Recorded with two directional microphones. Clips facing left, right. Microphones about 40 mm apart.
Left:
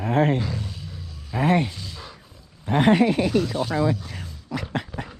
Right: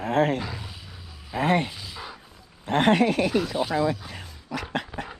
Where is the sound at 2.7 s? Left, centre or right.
Right.